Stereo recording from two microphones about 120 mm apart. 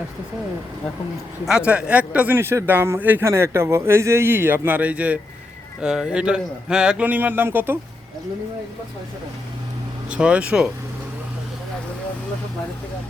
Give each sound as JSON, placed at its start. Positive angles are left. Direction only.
{"t": 1.5, "sound": "a man's voice", "side_deg": -10}
{"t": 10.1, "sound": "a man's voice", "side_deg": -10}